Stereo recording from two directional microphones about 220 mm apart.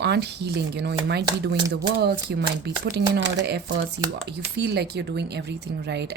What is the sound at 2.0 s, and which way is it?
A woman's voice, 50° right (ahead or behind).